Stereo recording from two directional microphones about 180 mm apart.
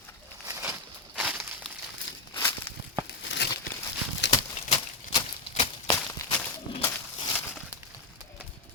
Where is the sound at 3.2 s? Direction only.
80° left.